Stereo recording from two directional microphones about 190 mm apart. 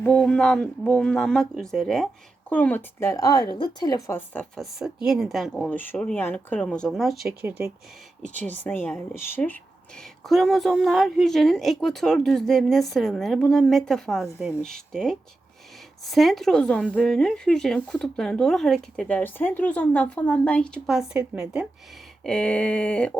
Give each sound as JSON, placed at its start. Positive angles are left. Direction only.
{"t": 0.0, "sound": "speech", "side_deg": 5}
{"t": 4.4, "sound": "speech", "side_deg": 0}
{"t": 8.4, "sound": "speech", "side_deg": 10}
{"t": 22.2, "sound": "speech", "side_deg": 5}